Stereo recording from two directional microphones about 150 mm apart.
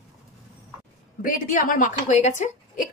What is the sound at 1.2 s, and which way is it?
Speech, 65° left (ahead or behind).